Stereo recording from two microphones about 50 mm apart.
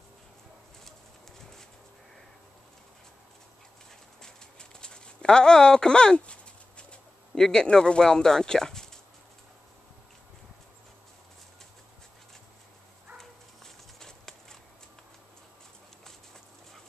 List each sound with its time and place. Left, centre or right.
4.2 s clip-clop: centre
7.6 s speech: centre
13.2 s a sound: centre